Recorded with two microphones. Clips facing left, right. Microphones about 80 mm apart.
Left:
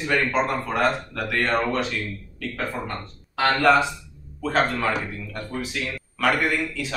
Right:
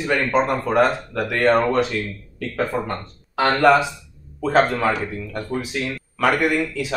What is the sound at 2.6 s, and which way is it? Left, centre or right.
Speech, right.